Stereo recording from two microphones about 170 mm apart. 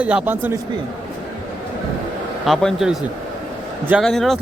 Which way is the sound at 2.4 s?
Centre (ahead or behind).